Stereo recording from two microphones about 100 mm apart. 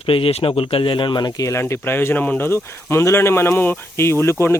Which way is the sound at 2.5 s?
25° left (ahead or behind).